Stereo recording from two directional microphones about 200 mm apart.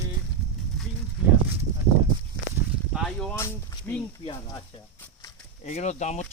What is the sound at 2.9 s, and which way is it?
Speech, 5° left (ahead or behind).